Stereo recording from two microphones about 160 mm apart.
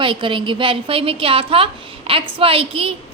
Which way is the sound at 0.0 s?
30° right (ahead or behind).